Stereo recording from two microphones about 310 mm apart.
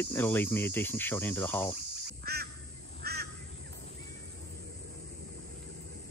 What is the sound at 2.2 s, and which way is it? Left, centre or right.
Duck, right.